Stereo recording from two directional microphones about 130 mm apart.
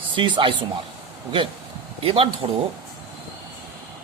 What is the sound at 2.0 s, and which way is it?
Speech, 45° right (ahead or behind).